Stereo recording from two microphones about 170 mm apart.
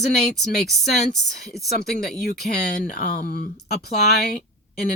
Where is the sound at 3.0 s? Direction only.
55° left (ahead or behind).